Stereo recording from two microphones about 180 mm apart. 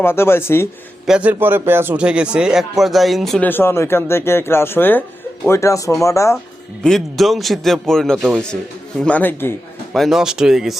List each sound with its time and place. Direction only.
0.0 s speech: 15° left (ahead or behind)
1.0 s a man's voice: 5° right (ahead or behind); by 6.3 s 15° left (ahead or behind)
6.8 s a man's voice: centre (ahead or behind)
9.9 s a man's voice: centre (ahead or behind)